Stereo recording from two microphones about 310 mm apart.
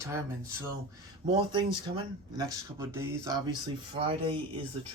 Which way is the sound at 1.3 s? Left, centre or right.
Centre.